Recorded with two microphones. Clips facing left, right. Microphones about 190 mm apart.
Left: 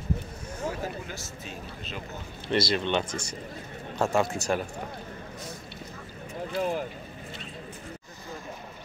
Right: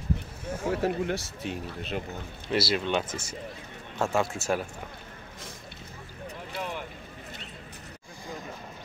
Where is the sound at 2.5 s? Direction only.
5° right (ahead or behind).